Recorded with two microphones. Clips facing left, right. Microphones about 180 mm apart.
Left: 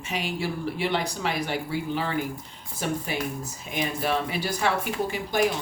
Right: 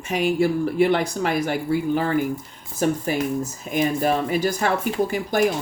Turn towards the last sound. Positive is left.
turn(degrees=-45)  # may be behind; listen again after turning